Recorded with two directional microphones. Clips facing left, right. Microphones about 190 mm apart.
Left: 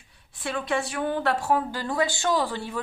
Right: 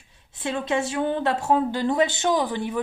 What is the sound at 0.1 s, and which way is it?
Speech, 25° right (ahead or behind).